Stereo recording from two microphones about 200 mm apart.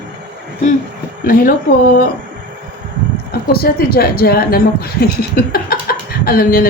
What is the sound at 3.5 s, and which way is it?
Speech, 50° left (ahead or behind).